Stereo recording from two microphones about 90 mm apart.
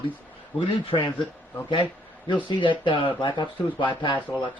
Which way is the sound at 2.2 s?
65° left (ahead or behind).